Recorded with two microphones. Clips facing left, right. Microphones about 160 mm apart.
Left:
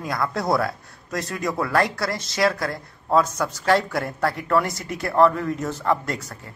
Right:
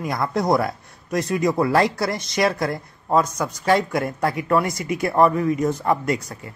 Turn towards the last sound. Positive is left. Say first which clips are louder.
# right 3 dB
turn(degrees=-15)  # may be behind; listen again after turning